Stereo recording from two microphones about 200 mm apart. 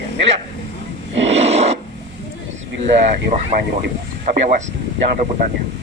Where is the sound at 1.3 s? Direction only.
30° right (ahead or behind).